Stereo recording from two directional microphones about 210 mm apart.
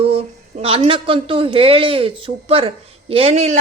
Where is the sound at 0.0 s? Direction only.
30° right (ahead or behind).